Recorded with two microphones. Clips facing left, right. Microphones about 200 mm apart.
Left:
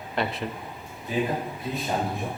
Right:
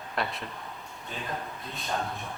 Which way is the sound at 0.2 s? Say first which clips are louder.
Left 4 dB; centre (ahead or behind).